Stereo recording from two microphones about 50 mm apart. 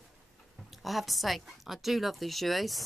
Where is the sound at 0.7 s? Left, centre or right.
Centre.